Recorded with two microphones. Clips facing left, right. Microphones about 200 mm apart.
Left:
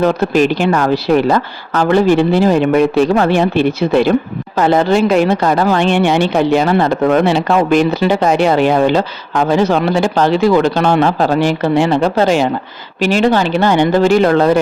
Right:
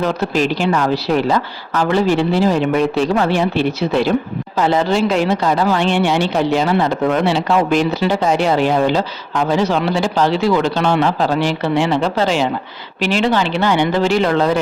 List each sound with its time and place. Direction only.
0.0 s a woman's voice: 55° left (ahead or behind)